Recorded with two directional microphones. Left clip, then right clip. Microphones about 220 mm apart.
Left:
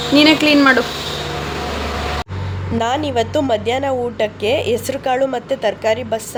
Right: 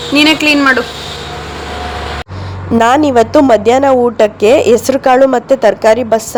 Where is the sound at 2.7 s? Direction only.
30° right (ahead or behind).